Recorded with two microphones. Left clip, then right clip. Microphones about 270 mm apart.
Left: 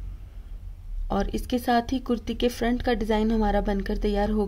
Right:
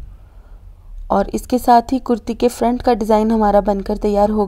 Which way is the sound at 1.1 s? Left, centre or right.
Right.